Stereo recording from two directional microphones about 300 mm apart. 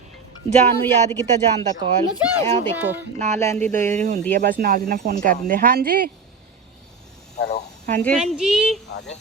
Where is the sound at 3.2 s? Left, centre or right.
Right.